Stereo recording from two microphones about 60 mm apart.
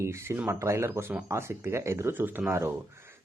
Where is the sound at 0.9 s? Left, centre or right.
Right.